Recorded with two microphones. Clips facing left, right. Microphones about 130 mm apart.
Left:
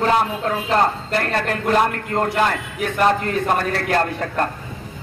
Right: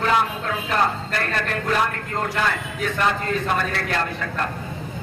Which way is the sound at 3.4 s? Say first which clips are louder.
Left 4 dB; 45° left (ahead or behind).